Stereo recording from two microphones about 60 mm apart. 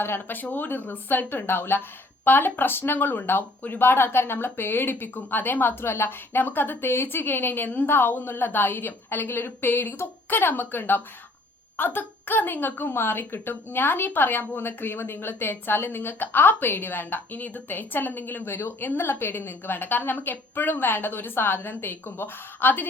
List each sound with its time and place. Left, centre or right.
0.0 s a woman's voice: left